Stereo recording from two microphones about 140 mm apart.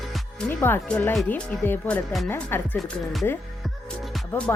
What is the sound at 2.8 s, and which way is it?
Speech, centre (ahead or behind).